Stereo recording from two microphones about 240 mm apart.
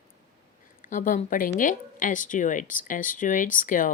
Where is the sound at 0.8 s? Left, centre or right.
Left.